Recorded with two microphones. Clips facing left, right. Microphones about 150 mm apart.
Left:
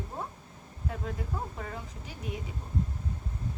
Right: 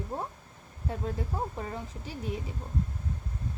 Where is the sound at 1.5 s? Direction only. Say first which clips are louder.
Right 3 dB; 25° right (ahead or behind).